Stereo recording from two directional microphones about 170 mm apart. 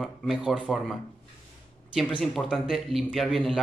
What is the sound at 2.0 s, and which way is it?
Speech, centre (ahead or behind).